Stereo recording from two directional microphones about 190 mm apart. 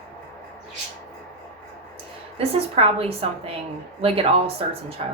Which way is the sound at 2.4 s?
30° right (ahead or behind).